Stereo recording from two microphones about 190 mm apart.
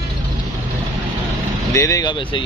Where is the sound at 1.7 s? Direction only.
15° left (ahead or behind).